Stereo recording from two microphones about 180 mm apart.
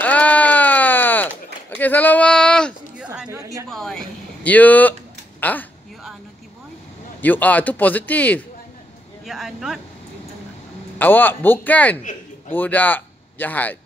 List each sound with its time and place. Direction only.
0.0 s a sound: 10° left (ahead or behind)
1.8 s a man's voice: 10° left (ahead or behind)
3.0 s a sound: 5° right (ahead or behind)
3.3 s a woman's voice: 15° right (ahead or behind)
3.6 s speech: centre (ahead or behind)
7.2 s a man's voice: 10° left (ahead or behind)
9.2 s speech: centre (ahead or behind)
11.0 s a man's voice: 10° left (ahead or behind)